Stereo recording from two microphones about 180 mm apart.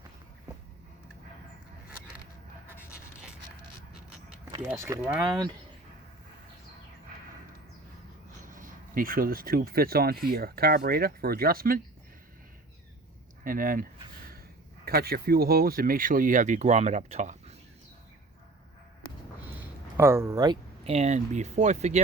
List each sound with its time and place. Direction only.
2.6 s a sound: 5° right (ahead or behind)
4.8 s speech: 15° right (ahead or behind)
8.4 s speech: 50° right (ahead or behind)
13.4 s speech: 50° right (ahead or behind)
14.8 s speech: 60° right (ahead or behind); by 17.6 s 40° right (ahead or behind)
20.0 s speech: 15° right (ahead or behind)
20.9 s speech: 40° right (ahead or behind)